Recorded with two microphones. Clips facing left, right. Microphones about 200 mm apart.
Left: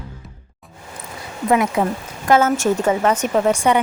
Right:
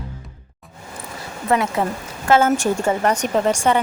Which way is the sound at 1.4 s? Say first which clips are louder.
Left 2 dB; 10° left (ahead or behind).